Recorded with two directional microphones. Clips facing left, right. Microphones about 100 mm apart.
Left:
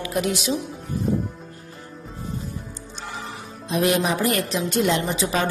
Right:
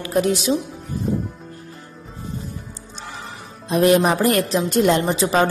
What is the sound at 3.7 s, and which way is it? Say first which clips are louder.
A woman's voice: right 5 dB; 45° right (ahead or behind).